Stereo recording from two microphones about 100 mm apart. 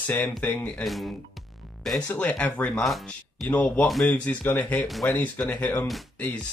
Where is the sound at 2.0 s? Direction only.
15° left (ahead or behind).